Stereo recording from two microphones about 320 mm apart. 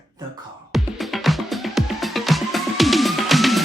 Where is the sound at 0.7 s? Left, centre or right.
Centre.